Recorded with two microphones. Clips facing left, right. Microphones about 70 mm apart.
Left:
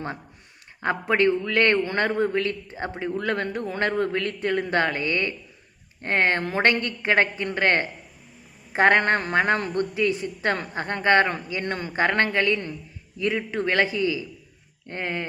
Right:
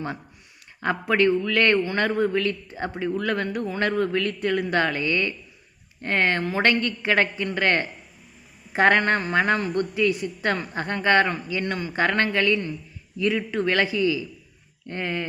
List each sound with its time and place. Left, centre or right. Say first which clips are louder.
0.8 s a man's voice: even; left